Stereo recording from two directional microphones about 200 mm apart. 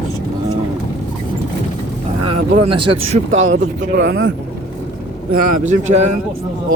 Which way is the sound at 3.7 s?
60° right (ahead or behind).